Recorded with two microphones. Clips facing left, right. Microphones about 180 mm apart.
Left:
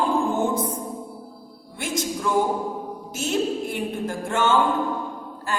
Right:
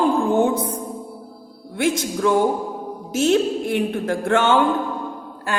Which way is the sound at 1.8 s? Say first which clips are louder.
Right 7 dB; 70° right (ahead or behind).